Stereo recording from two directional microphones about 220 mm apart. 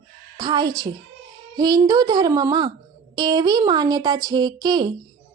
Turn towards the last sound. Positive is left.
turn(degrees=-20)  # may be behind; listen again after turning